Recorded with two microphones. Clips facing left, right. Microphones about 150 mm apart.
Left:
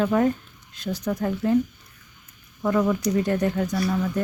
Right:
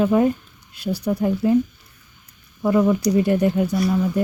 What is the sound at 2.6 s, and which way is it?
Speech, 10° right (ahead or behind).